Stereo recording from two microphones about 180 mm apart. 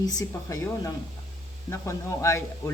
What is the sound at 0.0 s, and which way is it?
Speech, 20° left (ahead or behind).